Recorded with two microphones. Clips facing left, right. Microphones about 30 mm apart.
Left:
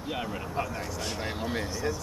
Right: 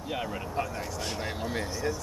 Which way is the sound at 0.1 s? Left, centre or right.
Centre.